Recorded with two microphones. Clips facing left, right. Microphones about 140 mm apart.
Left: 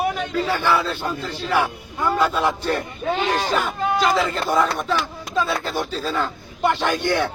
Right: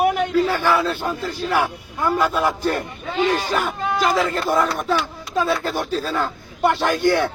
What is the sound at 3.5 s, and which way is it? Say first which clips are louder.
A man's voice: left 1 dB; 10° right (ahead or behind).